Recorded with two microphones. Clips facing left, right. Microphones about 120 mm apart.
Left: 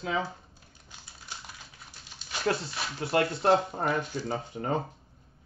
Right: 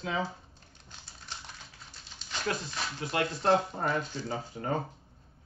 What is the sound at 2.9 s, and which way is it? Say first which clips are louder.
Speech: left 6 dB; 35° left (ahead or behind).